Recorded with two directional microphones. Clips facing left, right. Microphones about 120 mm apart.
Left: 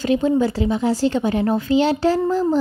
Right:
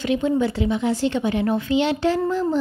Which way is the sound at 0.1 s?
35° left (ahead or behind).